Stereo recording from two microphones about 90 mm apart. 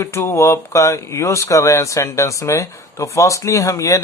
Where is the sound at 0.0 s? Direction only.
30° left (ahead or behind).